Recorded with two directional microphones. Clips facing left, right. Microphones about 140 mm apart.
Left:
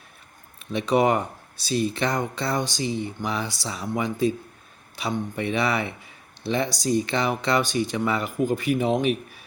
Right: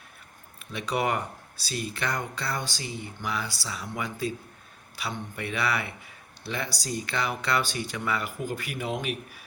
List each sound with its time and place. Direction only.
0.7 s speech: 25° left (ahead or behind)